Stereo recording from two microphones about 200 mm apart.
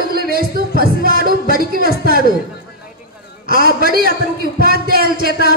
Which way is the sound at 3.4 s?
50° right (ahead or behind).